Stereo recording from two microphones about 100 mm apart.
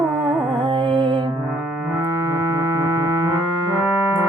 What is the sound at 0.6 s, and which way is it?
Music, 55° right (ahead or behind).